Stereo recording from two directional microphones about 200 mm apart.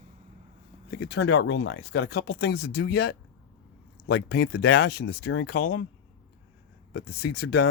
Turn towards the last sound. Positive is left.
turn(degrees=55)  # may be behind; listen again after turning